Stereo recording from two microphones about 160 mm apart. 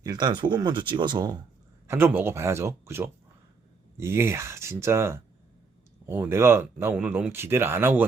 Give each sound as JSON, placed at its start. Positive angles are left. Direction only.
{"t": 0.0, "sound": "speech", "side_deg": -25}
{"t": 1.9, "sound": "speech", "side_deg": -15}